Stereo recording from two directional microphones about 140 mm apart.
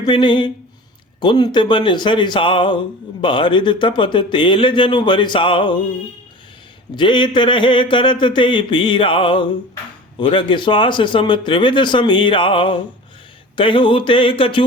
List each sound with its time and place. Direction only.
0.0 s speech: 35° left (ahead or behind)
6.9 s speech: 35° left (ahead or behind)